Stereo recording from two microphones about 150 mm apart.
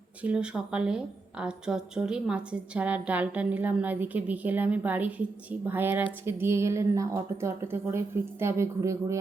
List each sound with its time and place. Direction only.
0.2 s a woman's voice: 5° right (ahead or behind)